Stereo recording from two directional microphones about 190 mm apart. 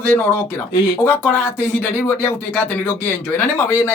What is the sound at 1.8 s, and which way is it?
Speech, 10° left (ahead or behind).